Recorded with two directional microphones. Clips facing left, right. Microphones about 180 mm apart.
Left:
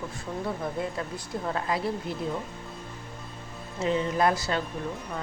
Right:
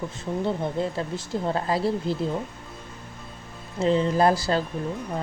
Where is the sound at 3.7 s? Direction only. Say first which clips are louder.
Right 5 dB; 30° right (ahead or behind).